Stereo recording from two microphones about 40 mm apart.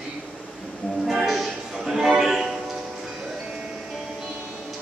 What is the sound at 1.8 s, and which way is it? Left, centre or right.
Music, centre.